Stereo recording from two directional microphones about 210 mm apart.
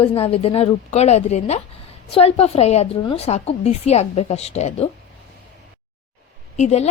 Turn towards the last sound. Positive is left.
turn(degrees=35)  # may be behind; listen again after turning